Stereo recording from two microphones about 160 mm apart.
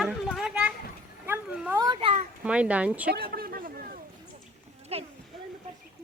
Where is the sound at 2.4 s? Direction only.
10° right (ahead or behind).